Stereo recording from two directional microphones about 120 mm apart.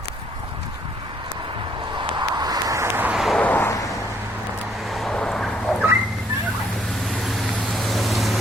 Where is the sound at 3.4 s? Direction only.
15° left (ahead or behind).